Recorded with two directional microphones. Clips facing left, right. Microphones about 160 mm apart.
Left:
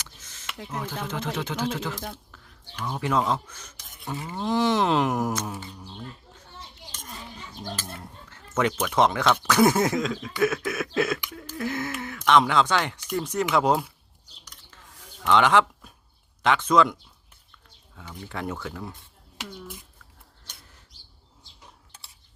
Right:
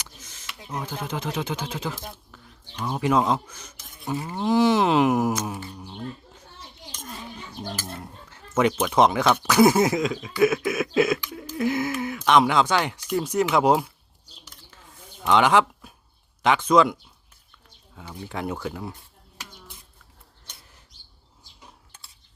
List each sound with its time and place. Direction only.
0.0 s a sound: 15° right (ahead or behind)
1.0 s speech: 15° right (ahead or behind)
4.4 s speech: 5° right (ahead or behind)
8.3 s speech: 15° right (ahead or behind)
15.2 s speech: 10° right (ahead or behind)
18.1 s speech: 15° right (ahead or behind)